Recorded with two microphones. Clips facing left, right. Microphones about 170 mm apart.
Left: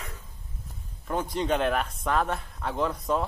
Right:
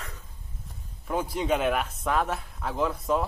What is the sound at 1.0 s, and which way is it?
Speech, 5° right (ahead or behind).